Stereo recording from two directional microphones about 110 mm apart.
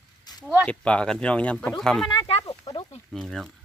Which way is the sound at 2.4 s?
30° left (ahead or behind).